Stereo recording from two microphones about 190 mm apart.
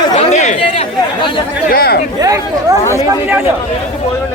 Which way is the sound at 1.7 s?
55° left (ahead or behind).